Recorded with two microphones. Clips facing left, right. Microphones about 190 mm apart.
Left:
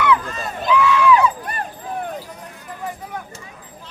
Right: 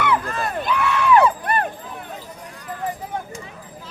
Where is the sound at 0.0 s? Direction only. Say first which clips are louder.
Left 2 dB; 55° right (ahead or behind).